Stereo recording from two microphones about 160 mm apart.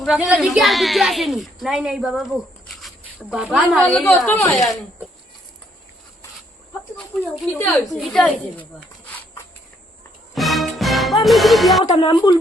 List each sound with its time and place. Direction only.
0.0 s a woman's voice: 5° right (ahead or behind); by 4.5 s 15° left (ahead or behind)
4.5 s a woman's voice: centre (ahead or behind)
7.4 s a woman's voice: centre (ahead or behind)
10.3 s music: centre (ahead or behind)
11.9 s speech: 30° left (ahead or behind)